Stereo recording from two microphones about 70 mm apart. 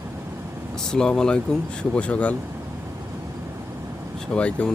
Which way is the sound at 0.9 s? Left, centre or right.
Centre.